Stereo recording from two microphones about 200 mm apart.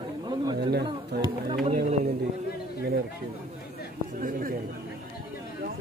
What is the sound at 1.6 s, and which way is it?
Speech, 35° right (ahead or behind).